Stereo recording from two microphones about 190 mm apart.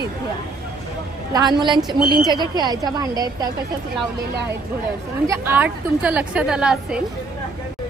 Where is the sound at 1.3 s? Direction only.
20° right (ahead or behind).